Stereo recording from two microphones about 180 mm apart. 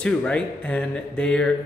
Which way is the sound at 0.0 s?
5° left (ahead or behind).